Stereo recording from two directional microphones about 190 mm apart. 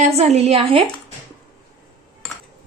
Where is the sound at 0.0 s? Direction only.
35° right (ahead or behind).